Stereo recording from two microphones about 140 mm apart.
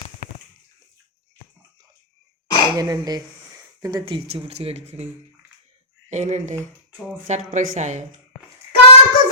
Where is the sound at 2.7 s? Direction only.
30° right (ahead or behind).